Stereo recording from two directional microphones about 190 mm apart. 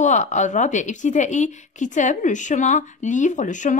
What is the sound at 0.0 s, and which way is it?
Speech, 40° left (ahead or behind).